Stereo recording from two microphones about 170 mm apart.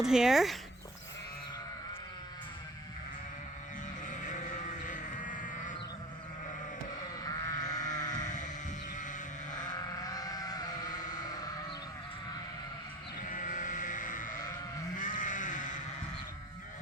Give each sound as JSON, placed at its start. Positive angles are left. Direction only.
{"t": 0.0, "sound": "speech", "side_deg": -5}
{"t": 4.0, "sound": "sheep", "side_deg": 50}
{"t": 7.3, "sound": "sheep", "side_deg": 20}
{"t": 8.2, "sound": "sheep", "side_deg": 45}
{"t": 9.6, "sound": "sheep", "side_deg": 25}
{"t": 13.2, "sound": "sheep", "side_deg": 50}